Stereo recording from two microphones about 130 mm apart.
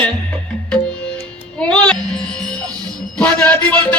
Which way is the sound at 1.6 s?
10° left (ahead or behind).